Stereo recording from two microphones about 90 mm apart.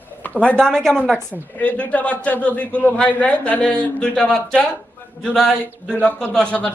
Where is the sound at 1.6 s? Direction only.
15° left (ahead or behind).